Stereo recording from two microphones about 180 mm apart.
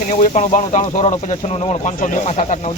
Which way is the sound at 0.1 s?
40° left (ahead or behind).